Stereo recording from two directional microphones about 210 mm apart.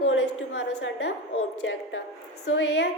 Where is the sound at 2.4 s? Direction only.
65° left (ahead or behind).